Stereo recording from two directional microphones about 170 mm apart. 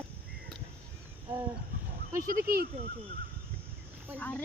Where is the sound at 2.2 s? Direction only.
55° right (ahead or behind).